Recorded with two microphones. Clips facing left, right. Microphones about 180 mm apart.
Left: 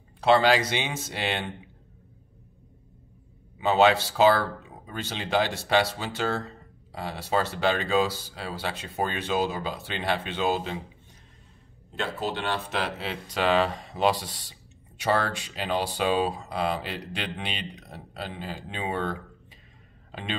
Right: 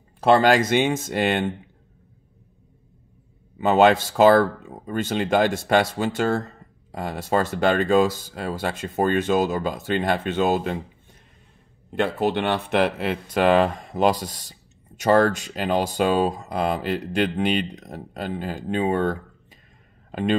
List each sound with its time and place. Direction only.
0.2 s speech: 45° right (ahead or behind)
3.5 s speech: 50° right (ahead or behind)
11.9 s a man's voice: 60° right (ahead or behind)